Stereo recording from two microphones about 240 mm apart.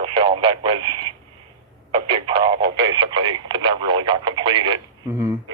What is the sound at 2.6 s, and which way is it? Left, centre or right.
Radio, right.